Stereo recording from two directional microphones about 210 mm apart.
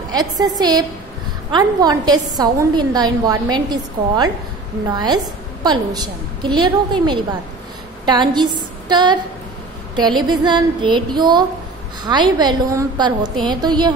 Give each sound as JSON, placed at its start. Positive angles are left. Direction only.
{"t": 0.1, "sound": "a woman's voice", "side_deg": -20}